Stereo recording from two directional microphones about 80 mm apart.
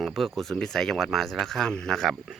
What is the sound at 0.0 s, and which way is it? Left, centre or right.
Speech, centre.